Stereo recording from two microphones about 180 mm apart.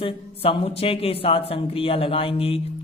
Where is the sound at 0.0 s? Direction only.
30° left (ahead or behind).